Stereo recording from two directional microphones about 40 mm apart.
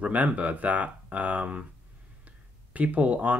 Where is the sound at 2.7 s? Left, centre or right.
Right.